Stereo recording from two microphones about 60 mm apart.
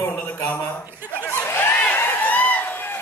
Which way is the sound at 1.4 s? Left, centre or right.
Left.